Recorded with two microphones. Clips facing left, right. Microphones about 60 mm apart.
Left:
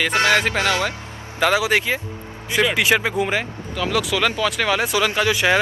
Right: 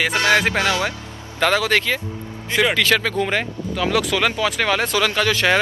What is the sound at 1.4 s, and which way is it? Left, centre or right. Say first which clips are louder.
Speech: even; centre.